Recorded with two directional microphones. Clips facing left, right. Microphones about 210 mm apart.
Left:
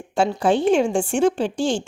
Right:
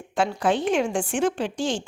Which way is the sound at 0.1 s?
30° left (ahead or behind).